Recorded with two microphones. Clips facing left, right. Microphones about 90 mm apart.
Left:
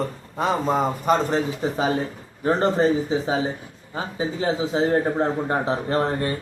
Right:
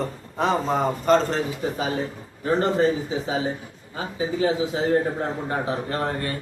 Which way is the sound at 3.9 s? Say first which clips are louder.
Right 1 dB; 30° left (ahead or behind).